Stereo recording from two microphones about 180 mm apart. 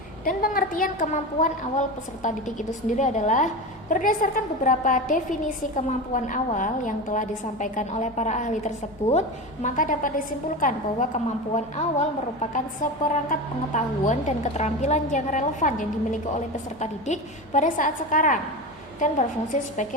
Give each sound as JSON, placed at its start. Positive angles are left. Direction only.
{"t": 0.3, "sound": "a woman's voice", "side_deg": 50}
{"t": 19.5, "sound": "a woman's voice", "side_deg": 45}